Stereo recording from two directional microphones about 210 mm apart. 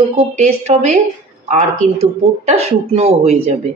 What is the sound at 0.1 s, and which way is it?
Speech, 30° right (ahead or behind).